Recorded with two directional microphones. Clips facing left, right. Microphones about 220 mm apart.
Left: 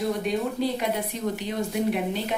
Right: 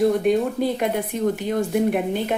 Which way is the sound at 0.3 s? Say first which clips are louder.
Right 6 dB; 55° right (ahead or behind).